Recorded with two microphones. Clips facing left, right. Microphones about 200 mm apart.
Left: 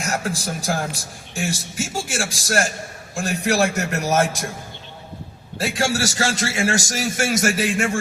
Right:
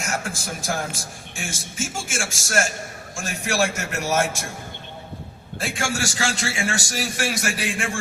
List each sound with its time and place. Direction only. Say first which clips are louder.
0.0 s a man's voice: left 4 dB; 35° left (ahead or behind)
5.5 s a man's voice: left 4 dB; 40° left (ahead or behind)